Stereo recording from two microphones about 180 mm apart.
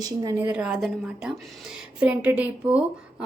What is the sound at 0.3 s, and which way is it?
A woman's voice, 10° right (ahead or behind).